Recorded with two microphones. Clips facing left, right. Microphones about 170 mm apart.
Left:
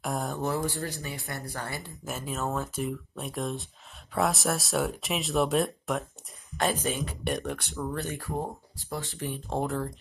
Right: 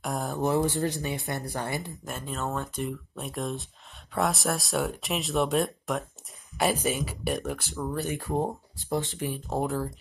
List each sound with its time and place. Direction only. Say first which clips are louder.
0.0 s a sound: even; centre (ahead or behind)
0.4 s speech: right 5 dB; 20° right (ahead or behind)
2.0 s speech: left 4 dB; 5° left (ahead or behind)
8.1 s speech: right 5 dB; 20° right (ahead or behind)
9.3 s speech: even; centre (ahead or behind)